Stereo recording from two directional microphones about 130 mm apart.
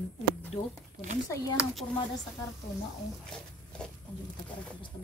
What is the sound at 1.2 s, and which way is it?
Speech, 25° left (ahead or behind).